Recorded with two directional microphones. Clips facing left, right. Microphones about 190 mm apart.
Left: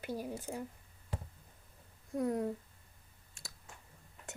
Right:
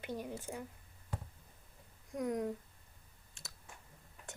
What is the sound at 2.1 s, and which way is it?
Speech, centre (ahead or behind).